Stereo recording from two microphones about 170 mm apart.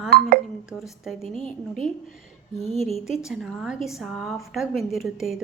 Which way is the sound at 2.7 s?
40° right (ahead or behind).